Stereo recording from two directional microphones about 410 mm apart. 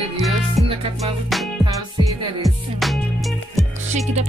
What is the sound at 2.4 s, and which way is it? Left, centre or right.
Music, centre.